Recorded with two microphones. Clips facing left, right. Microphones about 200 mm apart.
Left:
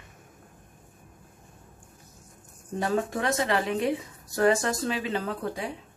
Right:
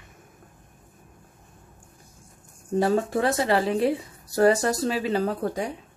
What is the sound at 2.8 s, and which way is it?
Speech, 35° right (ahead or behind).